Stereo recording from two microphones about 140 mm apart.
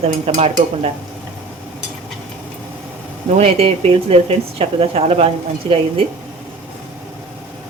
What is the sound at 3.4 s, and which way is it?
Speech, 45° right (ahead or behind).